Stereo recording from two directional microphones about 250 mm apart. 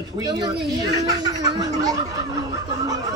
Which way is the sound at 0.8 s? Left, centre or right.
Centre.